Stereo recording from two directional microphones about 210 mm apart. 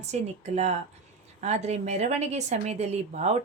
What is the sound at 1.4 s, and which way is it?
Speech, 30° right (ahead or behind).